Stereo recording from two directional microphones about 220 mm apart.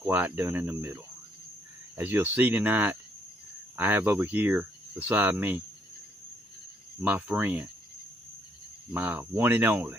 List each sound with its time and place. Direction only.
0.0 s speech: 10° right (ahead or behind)
7.0 s speech: 5° right (ahead or behind)
8.9 s speech: 5° right (ahead or behind)